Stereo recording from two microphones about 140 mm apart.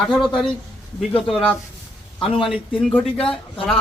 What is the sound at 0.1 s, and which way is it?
A man's voice, 5° left (ahead or behind).